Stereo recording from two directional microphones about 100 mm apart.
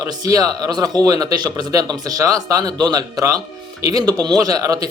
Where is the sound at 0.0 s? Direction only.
40° right (ahead or behind).